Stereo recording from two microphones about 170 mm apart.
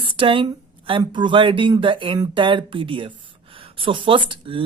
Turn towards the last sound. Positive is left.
turn(degrees=-30)  # may be behind; listen again after turning